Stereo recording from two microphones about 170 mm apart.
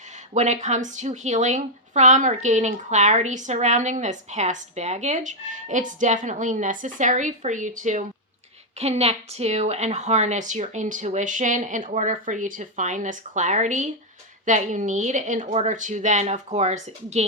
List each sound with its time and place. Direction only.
0.3 s speech: 45° right (ahead or behind)